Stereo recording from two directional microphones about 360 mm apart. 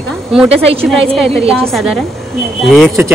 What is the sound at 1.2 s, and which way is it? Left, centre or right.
A woman's voice, centre.